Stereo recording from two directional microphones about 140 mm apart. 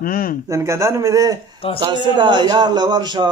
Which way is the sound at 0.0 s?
90° left.